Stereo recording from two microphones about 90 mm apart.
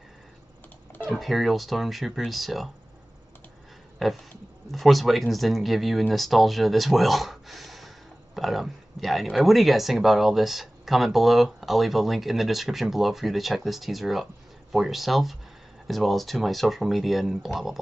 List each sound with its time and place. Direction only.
1.1 s speech: centre (ahead or behind)
4.0 s speech: centre (ahead or behind)